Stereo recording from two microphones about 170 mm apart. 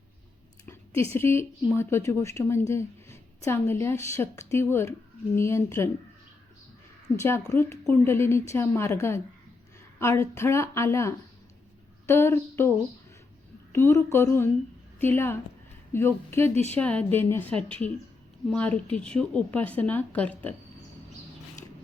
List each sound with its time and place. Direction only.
0.6 s speech: 15° left (ahead or behind)
7.2 s speech: 15° left (ahead or behind)
13.7 s a woman's voice: 15° left (ahead or behind)